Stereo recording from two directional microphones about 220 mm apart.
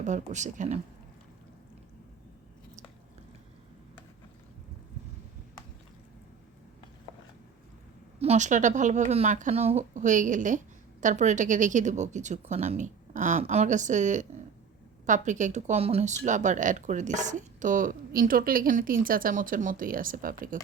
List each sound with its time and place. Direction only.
0.0 s speech: 35° right (ahead or behind)
8.2 s speech: 30° right (ahead or behind)